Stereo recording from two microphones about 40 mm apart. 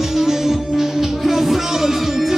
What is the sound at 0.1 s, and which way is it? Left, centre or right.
Music, centre.